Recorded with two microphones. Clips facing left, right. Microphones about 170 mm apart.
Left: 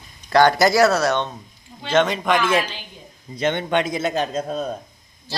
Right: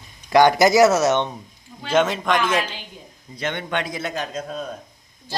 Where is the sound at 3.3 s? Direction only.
25° left (ahead or behind).